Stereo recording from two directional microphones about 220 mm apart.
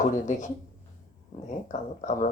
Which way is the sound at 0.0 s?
30° left (ahead or behind).